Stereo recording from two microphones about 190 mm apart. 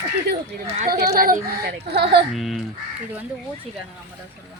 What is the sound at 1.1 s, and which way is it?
Speech, 50° right (ahead or behind).